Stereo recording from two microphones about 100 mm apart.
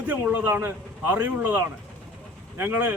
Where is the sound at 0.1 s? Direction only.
15° right (ahead or behind).